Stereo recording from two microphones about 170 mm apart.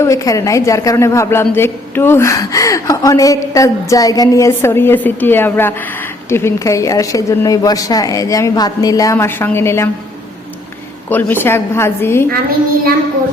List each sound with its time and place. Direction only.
0.0 s a man's voice: 20° left (ahead or behind)
11.1 s a man's voice: 10° left (ahead or behind)